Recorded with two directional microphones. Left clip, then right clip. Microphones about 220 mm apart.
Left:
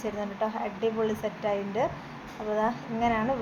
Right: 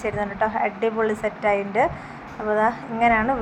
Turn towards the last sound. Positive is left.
turn(degrees=-15)  # may be behind; listen again after turning